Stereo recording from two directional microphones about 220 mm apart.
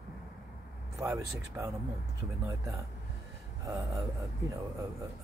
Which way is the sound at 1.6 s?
15° right (ahead or behind).